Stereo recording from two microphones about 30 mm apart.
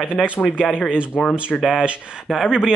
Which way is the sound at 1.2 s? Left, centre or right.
Centre.